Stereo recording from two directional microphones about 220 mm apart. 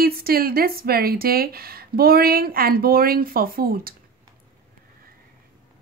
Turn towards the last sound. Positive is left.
turn(degrees=-40)  # may be behind; listen again after turning